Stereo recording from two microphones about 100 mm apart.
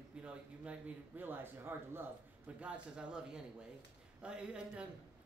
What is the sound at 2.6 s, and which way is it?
A man's voice, 10° right (ahead or behind).